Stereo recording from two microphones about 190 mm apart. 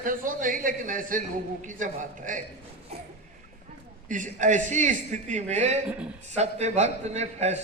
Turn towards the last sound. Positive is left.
turn(degrees=-35)  # may be behind; listen again after turning